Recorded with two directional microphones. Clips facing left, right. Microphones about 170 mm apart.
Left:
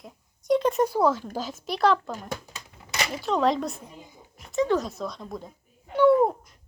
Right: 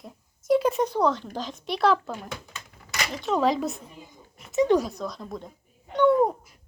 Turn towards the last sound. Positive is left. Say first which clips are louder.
# left 1 dB
turn(degrees=5)  # may be behind; listen again after turning